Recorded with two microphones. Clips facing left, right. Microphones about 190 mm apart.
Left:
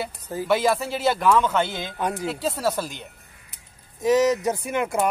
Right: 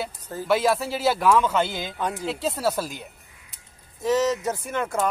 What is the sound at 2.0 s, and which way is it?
Speech, 15° left (ahead or behind).